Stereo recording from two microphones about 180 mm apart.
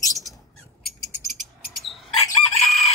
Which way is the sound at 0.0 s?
20° left (ahead or behind).